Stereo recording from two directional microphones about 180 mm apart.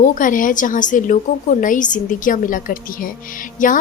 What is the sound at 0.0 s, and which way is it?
A woman's voice, 45° left (ahead or behind).